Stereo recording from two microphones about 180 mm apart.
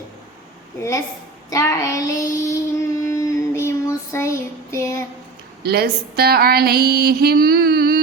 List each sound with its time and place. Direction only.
0.8 s a woman's voice: 15° left (ahead or behind)
1.5 s child singing: 15° left (ahead or behind)
5.6 s a sound: 60° right (ahead or behind)